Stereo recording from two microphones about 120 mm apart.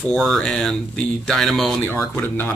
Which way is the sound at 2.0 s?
15° left (ahead or behind).